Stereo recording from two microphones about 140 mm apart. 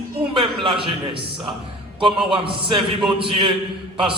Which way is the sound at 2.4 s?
40° right (ahead or behind).